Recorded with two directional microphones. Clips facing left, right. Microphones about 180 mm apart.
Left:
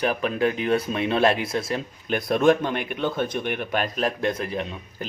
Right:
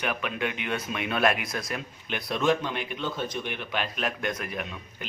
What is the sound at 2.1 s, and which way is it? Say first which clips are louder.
Speech: left 7 dB; 50° left (ahead or behind).